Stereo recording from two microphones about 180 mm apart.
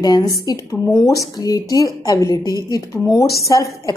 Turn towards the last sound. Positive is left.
turn(degrees=20)  # may be behind; listen again after turning